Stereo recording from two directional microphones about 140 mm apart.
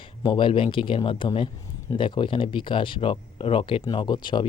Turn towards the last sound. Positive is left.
turn(degrees=35)  # may be behind; listen again after turning